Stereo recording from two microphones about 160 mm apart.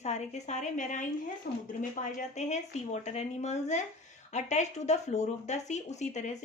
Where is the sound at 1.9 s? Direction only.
50° left (ahead or behind).